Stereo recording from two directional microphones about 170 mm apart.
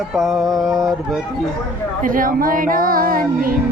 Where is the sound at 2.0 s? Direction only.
55° right (ahead or behind).